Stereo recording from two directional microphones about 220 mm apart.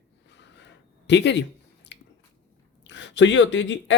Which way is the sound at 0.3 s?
55° left (ahead or behind).